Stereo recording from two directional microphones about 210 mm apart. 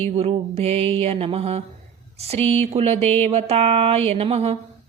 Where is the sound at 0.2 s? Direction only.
30° right (ahead or behind).